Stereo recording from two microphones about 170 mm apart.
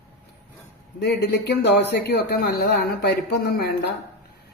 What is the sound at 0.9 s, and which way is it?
A man's voice, 80° left.